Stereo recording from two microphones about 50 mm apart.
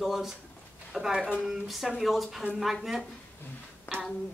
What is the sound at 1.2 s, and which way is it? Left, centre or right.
Speech, right.